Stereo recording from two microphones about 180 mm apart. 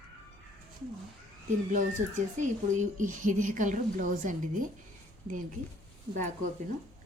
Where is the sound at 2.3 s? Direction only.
45° right (ahead or behind).